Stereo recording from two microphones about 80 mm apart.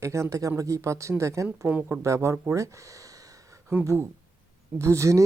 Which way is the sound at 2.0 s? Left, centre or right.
Right.